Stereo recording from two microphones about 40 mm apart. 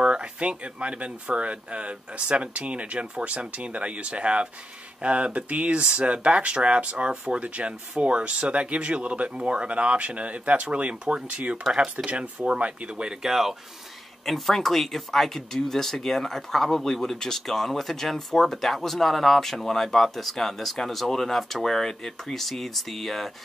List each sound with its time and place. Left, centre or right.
0.0 s speech: right
12.4 s speech: right
13.3 s speech: centre
14.2 s speech: centre